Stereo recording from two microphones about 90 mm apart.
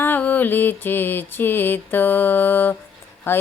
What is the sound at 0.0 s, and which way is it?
Speech, 20° left (ahead or behind).